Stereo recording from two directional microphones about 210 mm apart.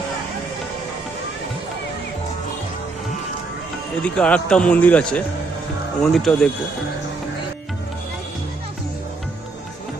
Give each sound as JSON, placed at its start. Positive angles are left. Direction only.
{"t": 4.0, "sound": "a man's voice", "side_deg": 5}